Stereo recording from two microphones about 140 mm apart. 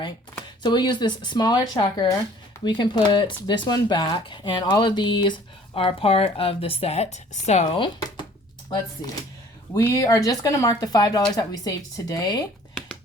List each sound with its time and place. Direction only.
0.6 s speech: 30° left (ahead or behind); by 7.8 s 50° left (ahead or behind)
9.7 s speech: 25° left (ahead or behind)